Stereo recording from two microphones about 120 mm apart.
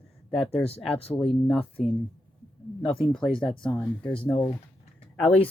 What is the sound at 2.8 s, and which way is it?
Speech, 45° left (ahead or behind).